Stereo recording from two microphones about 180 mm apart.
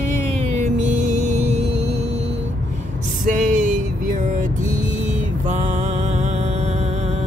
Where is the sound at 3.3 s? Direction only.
45° right (ahead or behind).